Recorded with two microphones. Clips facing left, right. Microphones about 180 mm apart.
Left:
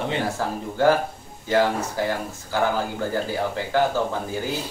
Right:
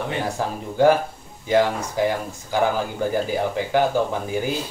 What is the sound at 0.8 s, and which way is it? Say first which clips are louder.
Speech: right 3 dB; 15° right (ahead or behind).